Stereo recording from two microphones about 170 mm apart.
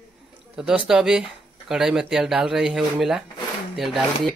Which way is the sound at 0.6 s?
5° right (ahead or behind).